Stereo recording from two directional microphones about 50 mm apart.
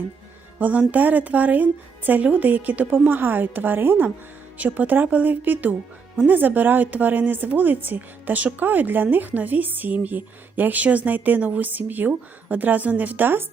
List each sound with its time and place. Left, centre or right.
0.6 s a woman's voice: right
4.5 s speech: right